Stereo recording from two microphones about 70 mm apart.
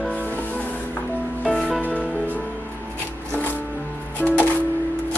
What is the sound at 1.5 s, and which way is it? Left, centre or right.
Music, centre.